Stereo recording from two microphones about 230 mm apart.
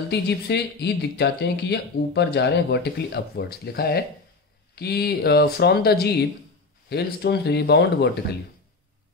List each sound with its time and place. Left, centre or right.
0.1 s speech: left